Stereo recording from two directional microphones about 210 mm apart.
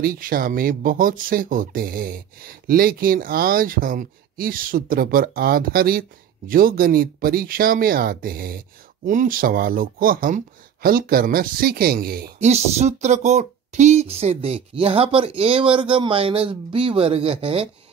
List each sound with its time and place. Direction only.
0.0 s speech: 45° right (ahead or behind)
12.4 s speech: 30° right (ahead or behind)